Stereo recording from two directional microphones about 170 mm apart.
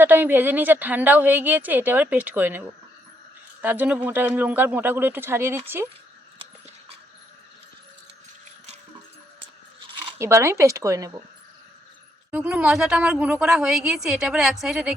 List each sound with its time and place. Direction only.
0.0 s a woman's voice: 10° right (ahead or behind)
10.2 s a woman's voice: 15° right (ahead or behind)
12.3 s a woman's voice: 5° right (ahead or behind)